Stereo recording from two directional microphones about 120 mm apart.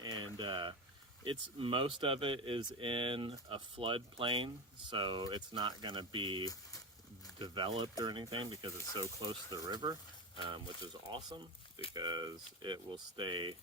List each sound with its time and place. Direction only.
0.0 s boiling: 40° right (ahead or behind)
1.2 s speech: 45° right (ahead or behind)
6.4 s speech: 30° left (ahead or behind)
7.3 s speech: 40° right (ahead or behind)